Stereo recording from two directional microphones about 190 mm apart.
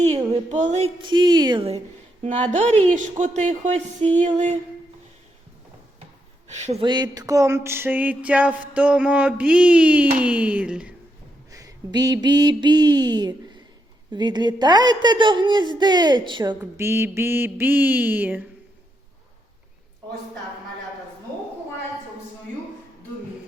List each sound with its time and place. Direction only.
0.0 s speech: 35° right (ahead or behind)
1.0 s a woman's voice: 25° right (ahead or behind)
6.5 s speech: 35° right (ahead or behind)
6.8 s mantra: 20° right (ahead or behind); by 10.9 s 5° right (ahead or behind)
11.5 s a woman's voice: 20° right (ahead or behind)
16.6 s mantra: 15° right (ahead or behind)